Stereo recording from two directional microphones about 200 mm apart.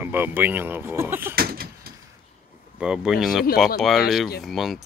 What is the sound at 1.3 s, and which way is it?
Door, 50° right (ahead or behind).